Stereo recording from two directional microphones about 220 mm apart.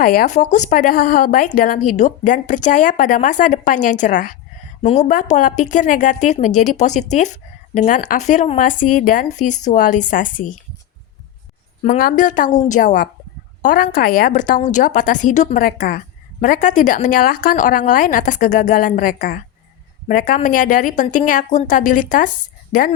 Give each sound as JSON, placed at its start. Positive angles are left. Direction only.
{"t": 0.0, "sound": "a woman's voice", "side_deg": 40}
{"t": 11.8, "sound": "a woman's voice", "side_deg": 35}